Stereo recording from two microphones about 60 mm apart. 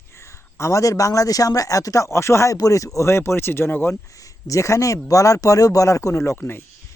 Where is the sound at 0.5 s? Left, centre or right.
Left.